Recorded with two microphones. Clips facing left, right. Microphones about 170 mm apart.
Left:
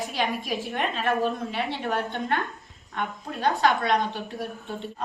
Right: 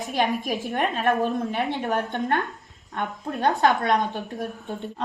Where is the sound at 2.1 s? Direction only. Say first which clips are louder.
Right 3 dB; 50° right (ahead or behind).